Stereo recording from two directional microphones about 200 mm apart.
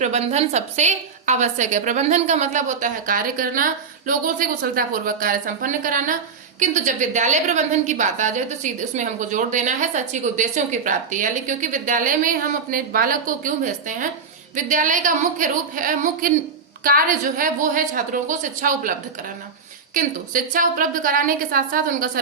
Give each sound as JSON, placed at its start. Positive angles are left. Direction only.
{"t": 0.0, "sound": "a woman's voice", "side_deg": -35}